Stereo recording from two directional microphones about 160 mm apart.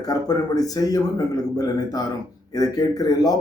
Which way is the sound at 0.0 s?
25° left (ahead or behind).